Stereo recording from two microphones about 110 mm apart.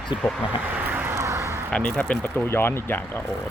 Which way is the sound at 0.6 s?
15° right (ahead or behind).